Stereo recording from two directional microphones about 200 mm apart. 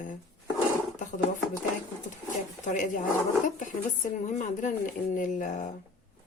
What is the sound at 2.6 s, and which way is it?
Speech, 40° left (ahead or behind).